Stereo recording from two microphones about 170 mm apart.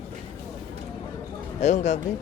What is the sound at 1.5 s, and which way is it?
Speech, 45° left (ahead or behind).